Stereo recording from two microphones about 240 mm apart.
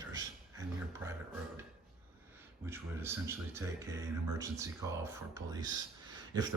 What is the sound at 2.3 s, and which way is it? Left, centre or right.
Speech, centre.